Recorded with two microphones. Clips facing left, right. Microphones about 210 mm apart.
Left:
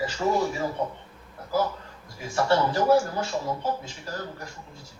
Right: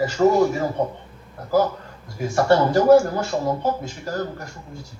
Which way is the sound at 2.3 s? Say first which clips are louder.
Right 6 dB; 45° right (ahead or behind).